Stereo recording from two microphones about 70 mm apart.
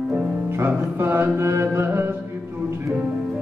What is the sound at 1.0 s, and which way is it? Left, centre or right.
Mantra, right.